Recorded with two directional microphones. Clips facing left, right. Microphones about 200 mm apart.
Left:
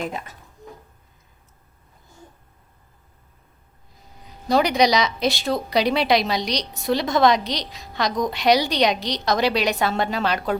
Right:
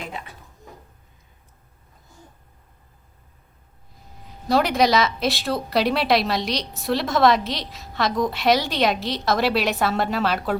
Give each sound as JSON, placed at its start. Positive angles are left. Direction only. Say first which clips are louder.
{"t": 0.1, "sound": "speech", "louder": "left 3 dB", "side_deg": 45}
{"t": 4.4, "sound": "speech", "louder": "left 1 dB", "side_deg": 0}